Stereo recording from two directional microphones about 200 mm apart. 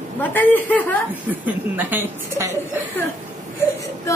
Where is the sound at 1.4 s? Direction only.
10° right (ahead or behind).